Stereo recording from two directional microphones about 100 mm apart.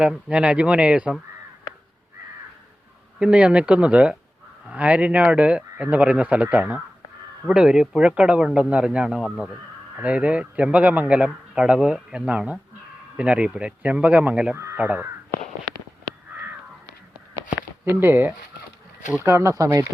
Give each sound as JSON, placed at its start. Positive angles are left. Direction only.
{"t": 0.3, "sound": "speech", "side_deg": -10}
{"t": 3.2, "sound": "speech", "side_deg": -10}
{"t": 14.5, "sound": "speech", "side_deg": -30}
{"t": 14.8, "sound": "speech", "side_deg": -15}
{"t": 16.3, "sound": "crow", "side_deg": -15}
{"t": 17.8, "sound": "speech", "side_deg": -20}